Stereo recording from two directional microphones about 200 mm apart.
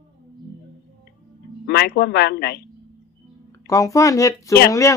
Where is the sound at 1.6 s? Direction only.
50° left (ahead or behind).